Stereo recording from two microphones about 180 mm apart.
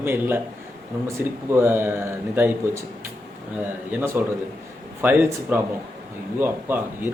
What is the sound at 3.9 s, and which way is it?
Speech, 10° right (ahead or behind).